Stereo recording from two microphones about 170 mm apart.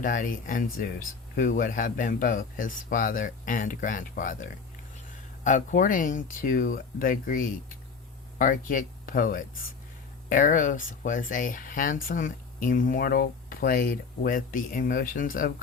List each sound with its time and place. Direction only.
0.0 s speech: 55° left (ahead or behind)